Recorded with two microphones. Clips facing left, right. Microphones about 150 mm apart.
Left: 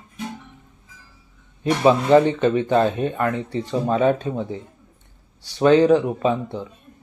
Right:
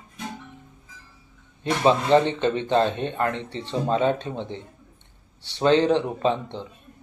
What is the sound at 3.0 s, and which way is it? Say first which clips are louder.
Speech: left 3 dB; 25° right (ahead or behind).